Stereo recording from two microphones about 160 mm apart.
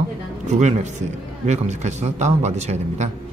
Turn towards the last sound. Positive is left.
turn(degrees=-45)  # may be behind; listen again after turning